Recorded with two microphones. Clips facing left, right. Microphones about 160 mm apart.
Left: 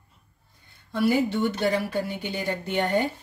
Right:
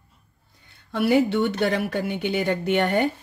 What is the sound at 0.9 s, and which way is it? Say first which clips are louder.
A woman's voice: right 3 dB; 70° right (ahead or behind).